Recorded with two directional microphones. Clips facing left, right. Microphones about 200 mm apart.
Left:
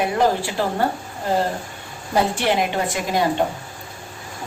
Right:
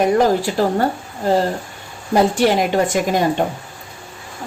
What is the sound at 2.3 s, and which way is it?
Speech, 45° right (ahead or behind).